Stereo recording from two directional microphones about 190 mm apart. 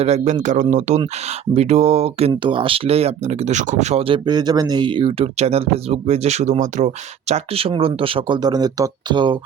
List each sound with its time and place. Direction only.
0.0 s speech: 35° right (ahead or behind)